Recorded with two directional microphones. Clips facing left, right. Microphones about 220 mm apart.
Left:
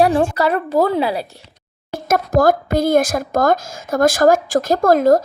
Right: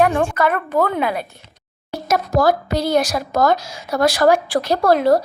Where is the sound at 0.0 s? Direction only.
35° left (ahead or behind).